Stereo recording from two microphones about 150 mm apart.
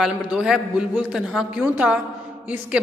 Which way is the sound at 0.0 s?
5° right (ahead or behind).